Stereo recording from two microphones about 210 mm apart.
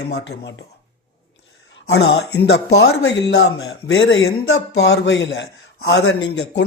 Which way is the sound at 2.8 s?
55° left (ahead or behind).